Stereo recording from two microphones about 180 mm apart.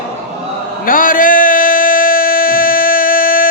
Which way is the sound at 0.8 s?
50° left (ahead or behind).